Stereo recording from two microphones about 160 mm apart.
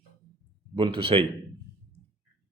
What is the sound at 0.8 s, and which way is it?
Speech, 35° right (ahead or behind).